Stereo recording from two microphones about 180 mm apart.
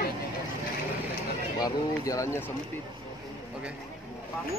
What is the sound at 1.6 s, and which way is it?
Speech, 20° left (ahead or behind).